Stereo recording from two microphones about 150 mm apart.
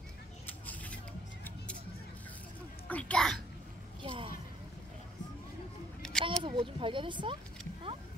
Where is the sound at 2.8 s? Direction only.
10° left (ahead or behind).